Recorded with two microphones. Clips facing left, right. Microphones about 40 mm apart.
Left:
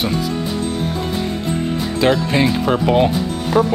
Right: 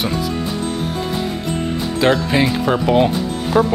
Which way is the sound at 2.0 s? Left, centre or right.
Centre.